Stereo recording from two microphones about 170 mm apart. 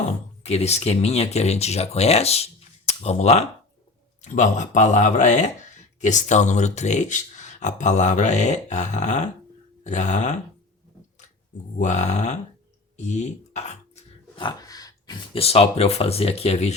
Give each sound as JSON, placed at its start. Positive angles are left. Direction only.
{"t": 0.4, "sound": "speech", "side_deg": 40}
{"t": 11.8, "sound": "speech", "side_deg": 45}